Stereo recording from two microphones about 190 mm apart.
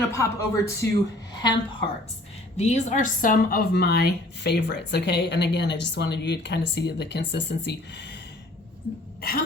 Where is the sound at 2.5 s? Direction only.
35° left (ahead or behind); by 8.1 s 65° left (ahead or behind).